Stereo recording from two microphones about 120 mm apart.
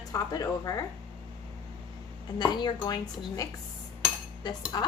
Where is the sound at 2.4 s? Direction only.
40° left (ahead or behind).